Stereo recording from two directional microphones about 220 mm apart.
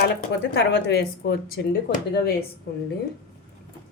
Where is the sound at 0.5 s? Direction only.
50° left (ahead or behind).